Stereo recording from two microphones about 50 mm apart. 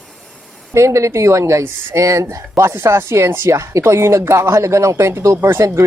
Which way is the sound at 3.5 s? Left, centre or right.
Right.